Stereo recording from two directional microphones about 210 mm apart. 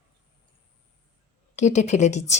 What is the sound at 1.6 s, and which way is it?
Speech, 35° left (ahead or behind).